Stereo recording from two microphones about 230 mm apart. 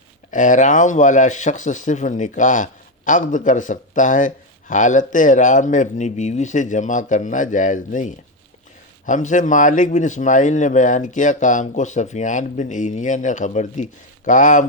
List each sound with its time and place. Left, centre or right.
0.3 s speech: left